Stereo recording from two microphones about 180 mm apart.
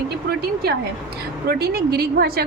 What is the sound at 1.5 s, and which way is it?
Speech, 60° right (ahead or behind).